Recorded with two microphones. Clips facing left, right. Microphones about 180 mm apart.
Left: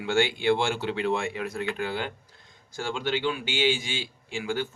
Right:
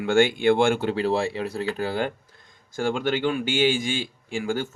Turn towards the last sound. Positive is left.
turn(degrees=-45)  # may be behind; listen again after turning